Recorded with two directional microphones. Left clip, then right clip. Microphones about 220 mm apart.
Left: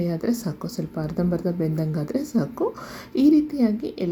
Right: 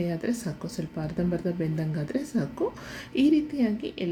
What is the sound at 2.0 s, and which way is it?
Speech, 15° left (ahead or behind).